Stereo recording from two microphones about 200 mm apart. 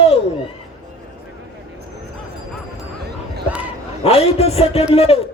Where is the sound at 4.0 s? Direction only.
30° left (ahead or behind).